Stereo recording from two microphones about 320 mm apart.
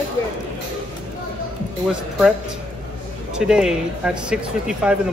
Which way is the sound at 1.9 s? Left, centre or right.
Centre.